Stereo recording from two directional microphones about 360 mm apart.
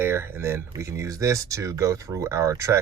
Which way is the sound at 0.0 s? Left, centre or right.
Centre.